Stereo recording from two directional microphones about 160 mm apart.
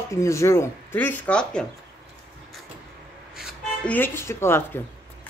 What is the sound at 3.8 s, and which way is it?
A woman's voice, 10° left (ahead or behind).